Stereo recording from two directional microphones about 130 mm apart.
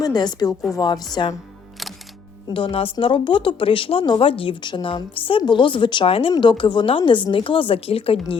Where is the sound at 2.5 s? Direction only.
45° left (ahead or behind).